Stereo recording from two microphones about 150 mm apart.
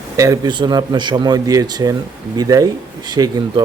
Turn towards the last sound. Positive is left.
turn(degrees=-30)  # may be behind; listen again after turning